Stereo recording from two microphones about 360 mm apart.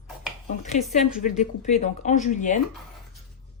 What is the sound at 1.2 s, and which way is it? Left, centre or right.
Speech, centre.